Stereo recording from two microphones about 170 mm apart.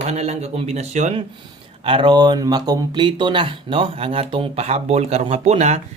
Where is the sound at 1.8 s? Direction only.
30° right (ahead or behind).